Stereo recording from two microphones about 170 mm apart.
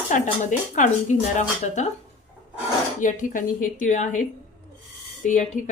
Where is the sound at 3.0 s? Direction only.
50° left (ahead or behind).